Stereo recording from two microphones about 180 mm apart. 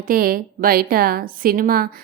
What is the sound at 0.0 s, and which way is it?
A woman's voice, 55° right (ahead or behind).